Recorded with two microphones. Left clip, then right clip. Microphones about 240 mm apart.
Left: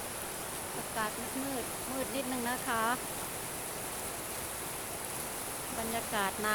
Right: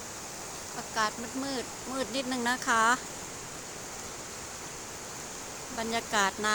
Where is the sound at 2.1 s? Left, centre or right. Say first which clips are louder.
Right 7 dB; right.